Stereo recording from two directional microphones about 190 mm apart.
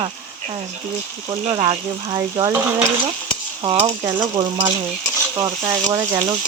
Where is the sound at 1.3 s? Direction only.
25° right (ahead or behind).